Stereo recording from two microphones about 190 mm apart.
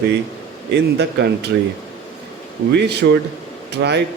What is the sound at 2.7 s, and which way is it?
Speech, 60° right (ahead or behind).